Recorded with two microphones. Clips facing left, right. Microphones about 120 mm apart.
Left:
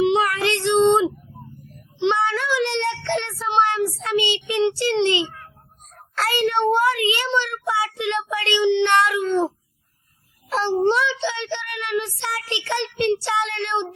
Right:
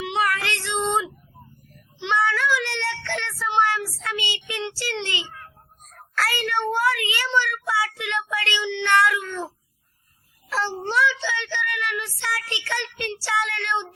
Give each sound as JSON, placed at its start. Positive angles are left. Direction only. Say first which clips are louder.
{"t": 0.0, "sound": "child singing", "louder": "left 6 dB", "side_deg": 20}
{"t": 10.5, "sound": "a sound", "louder": "left 5 dB", "side_deg": 20}
{"t": 10.8, "sound": "child singing", "louder": "left 3 dB", "side_deg": 20}